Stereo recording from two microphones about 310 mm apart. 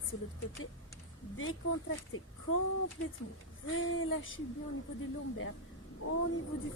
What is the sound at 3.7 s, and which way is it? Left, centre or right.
Speech, left.